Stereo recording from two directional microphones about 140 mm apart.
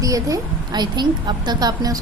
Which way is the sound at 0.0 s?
25° right (ahead or behind).